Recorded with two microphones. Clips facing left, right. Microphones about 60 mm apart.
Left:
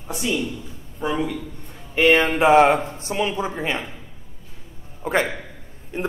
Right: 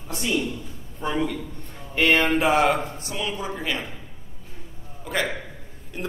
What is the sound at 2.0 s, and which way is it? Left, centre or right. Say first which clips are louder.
Speech: left 3 dB; centre.